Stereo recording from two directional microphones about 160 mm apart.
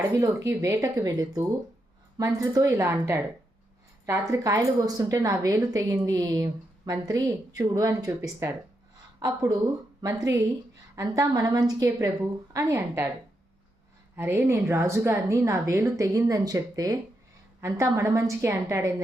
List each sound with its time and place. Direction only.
0.1 s a woman's voice: 20° right (ahead or behind)
14.2 s speech: 15° right (ahead or behind)